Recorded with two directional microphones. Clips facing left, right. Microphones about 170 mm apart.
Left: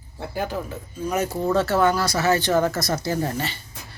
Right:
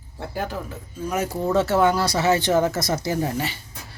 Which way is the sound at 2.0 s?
25° right (ahead or behind).